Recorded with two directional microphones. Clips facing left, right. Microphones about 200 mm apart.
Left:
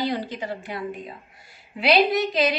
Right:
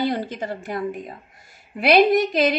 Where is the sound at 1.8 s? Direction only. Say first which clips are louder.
Right 4 dB; 50° right (ahead or behind).